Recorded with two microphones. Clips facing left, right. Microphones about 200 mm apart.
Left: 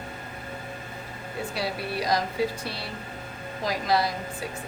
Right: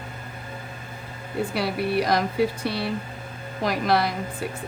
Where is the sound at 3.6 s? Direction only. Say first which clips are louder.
Right 3 dB; 60° right (ahead or behind).